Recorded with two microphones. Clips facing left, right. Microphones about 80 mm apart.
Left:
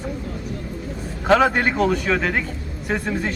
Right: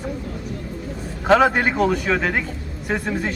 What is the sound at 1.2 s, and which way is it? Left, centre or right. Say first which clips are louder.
Speech: right 1 dB; centre.